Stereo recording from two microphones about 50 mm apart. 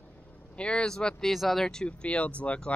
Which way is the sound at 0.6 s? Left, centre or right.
Left.